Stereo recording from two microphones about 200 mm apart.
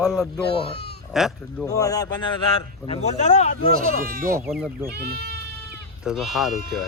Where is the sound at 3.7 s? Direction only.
45° right (ahead or behind).